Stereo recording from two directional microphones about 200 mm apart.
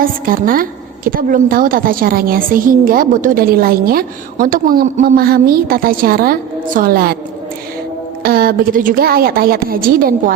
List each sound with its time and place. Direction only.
0.0 s a woman's voice: 45° right (ahead or behind)
8.2 s a woman's voice: 50° right (ahead or behind)